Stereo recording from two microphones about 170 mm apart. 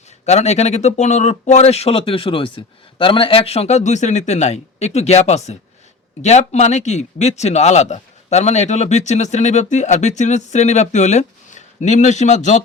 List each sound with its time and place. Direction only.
0.3 s a man's voice: 40° left (ahead or behind)